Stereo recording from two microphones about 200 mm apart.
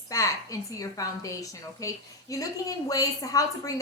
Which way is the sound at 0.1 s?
15° left (ahead or behind).